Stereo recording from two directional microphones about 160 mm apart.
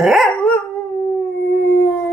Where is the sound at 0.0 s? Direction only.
Centre (ahead or behind).